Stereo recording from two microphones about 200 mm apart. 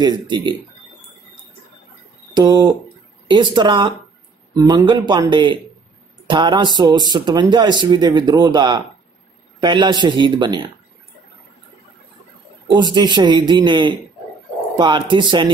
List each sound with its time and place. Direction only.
0.0 s speech: 20° right (ahead or behind)
2.3 s speech: 20° right (ahead or behind)
12.6 s speech: 25° right (ahead or behind)